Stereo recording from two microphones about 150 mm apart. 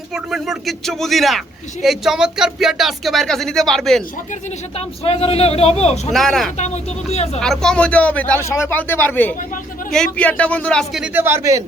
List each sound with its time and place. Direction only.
0.1 s speech: centre (ahead or behind)
5.0 s a man's voice: 40° left (ahead or behind)
6.1 s speech: centre (ahead or behind)
11.0 s speech: 15° right (ahead or behind)